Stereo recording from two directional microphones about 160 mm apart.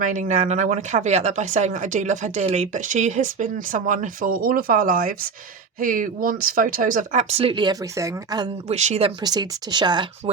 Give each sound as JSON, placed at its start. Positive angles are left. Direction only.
{"t": 0.0, "sound": "speech", "side_deg": -55}
{"t": 8.6, "sound": "speech", "side_deg": -45}
{"t": 9.2, "sound": "speech", "side_deg": -25}